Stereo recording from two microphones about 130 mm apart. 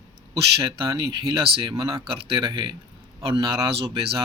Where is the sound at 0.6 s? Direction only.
40° right (ahead or behind).